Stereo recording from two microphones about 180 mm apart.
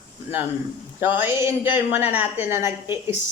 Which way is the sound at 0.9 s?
10° right (ahead or behind).